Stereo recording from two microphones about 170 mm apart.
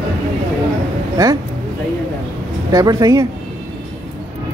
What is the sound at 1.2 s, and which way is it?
Speech, 20° right (ahead or behind).